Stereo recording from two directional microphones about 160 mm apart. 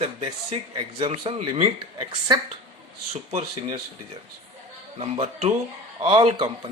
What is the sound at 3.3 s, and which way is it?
Speech, 40° right (ahead or behind).